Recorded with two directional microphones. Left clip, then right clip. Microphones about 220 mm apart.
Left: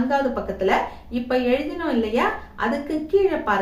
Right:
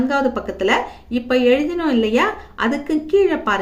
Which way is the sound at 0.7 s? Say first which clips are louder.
Right 3 dB; 50° right (ahead or behind).